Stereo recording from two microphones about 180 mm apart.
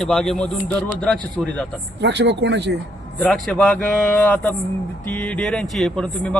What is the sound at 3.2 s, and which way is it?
A man's voice, centre (ahead or behind).